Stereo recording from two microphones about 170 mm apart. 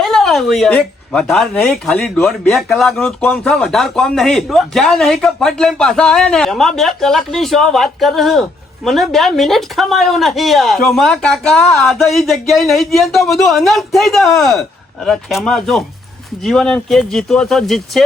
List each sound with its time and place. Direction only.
0.0 s a woman's voice: centre (ahead or behind)